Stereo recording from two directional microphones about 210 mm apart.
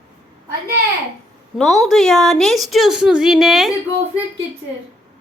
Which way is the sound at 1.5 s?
Centre (ahead or behind).